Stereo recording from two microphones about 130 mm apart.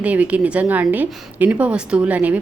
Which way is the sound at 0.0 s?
10° right (ahead or behind).